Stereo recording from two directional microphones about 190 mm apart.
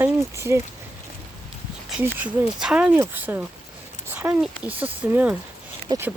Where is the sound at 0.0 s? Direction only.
15° right (ahead or behind).